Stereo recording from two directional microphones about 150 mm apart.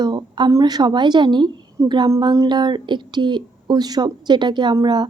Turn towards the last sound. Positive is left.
turn(degrees=-30)  # may be behind; listen again after turning